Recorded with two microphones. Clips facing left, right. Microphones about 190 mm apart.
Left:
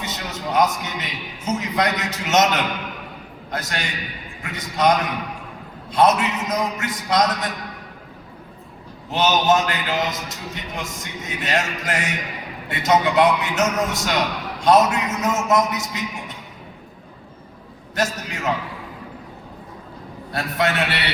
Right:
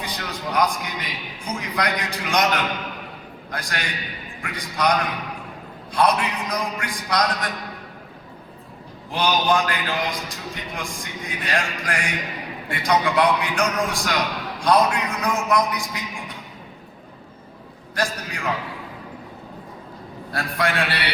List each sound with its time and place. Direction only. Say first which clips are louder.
0.0 s a man's voice: left 1 dB; 25° left (ahead or behind)
3.5 s a man's voice: left 2 dB; 25° left (ahead or behind)
9.1 s a man's voice: left 3 dB; 25° left (ahead or behind)
17.9 s a man's voice: left 2 dB; 25° left (ahead or behind)
20.3 s a man's voice: left 2 dB; 25° left (ahead or behind)